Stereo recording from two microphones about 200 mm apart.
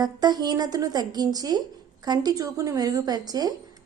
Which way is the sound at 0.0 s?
20° right (ahead or behind).